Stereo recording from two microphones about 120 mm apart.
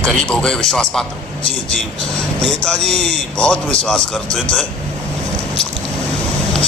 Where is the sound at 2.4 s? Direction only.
5° left (ahead or behind).